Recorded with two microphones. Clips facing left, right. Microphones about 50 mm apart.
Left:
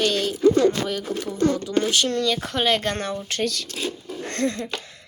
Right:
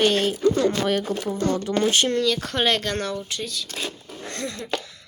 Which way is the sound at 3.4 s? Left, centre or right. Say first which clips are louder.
Left 6 dB; left.